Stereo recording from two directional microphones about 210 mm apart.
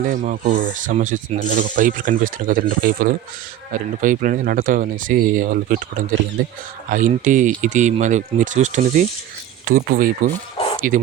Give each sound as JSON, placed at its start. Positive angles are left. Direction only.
{"t": 0.0, "sound": "speech", "side_deg": -40}